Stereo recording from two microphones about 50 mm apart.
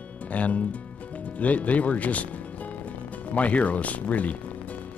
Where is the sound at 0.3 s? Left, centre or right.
Left.